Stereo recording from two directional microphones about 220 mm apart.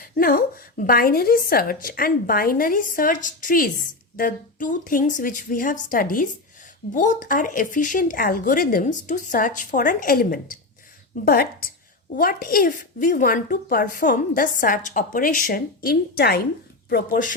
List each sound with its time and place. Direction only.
0.0 s a woman's voice: 40° left (ahead or behind)